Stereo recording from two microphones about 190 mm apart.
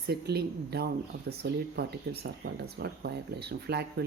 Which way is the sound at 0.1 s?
55° right (ahead or behind).